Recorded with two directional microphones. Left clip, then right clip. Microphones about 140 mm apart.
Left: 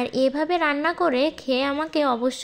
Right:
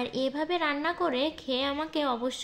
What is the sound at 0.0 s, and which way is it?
A woman's voice, 40° left (ahead or behind).